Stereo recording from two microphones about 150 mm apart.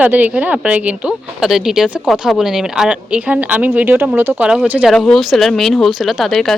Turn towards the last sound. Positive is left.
turn(degrees=0)  # may be behind; listen again after turning